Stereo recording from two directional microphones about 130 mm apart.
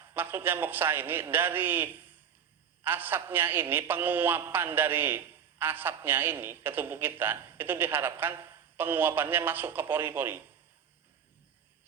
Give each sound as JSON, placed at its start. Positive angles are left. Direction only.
{"t": 0.1, "sound": "a man's voice", "side_deg": -15}